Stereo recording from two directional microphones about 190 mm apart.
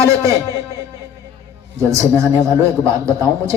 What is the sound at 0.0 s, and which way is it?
Speech, 15° right (ahead or behind).